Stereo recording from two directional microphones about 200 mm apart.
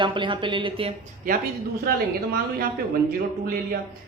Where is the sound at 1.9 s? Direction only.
50° right (ahead or behind).